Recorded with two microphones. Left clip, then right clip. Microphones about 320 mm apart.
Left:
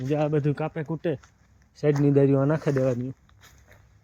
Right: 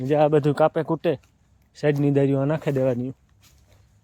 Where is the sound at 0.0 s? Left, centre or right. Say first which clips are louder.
Right 7 dB; centre.